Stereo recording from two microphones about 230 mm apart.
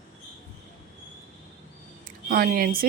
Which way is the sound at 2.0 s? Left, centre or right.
Right.